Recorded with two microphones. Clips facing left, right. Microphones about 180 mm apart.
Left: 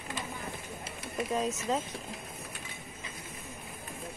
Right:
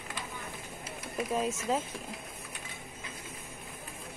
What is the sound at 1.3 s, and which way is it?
Speech, 5° right (ahead or behind).